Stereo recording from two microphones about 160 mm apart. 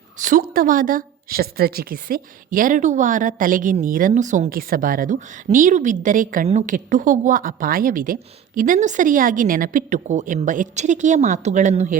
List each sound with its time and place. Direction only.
0.2 s speech: 55° right (ahead or behind)